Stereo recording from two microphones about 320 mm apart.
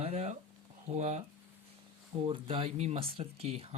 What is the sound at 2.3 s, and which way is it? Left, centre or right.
Speech, centre.